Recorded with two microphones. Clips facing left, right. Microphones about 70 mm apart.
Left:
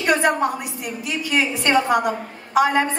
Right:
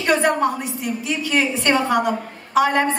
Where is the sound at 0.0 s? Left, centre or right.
Centre.